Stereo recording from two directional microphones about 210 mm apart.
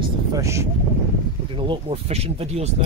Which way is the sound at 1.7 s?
30° right (ahead or behind).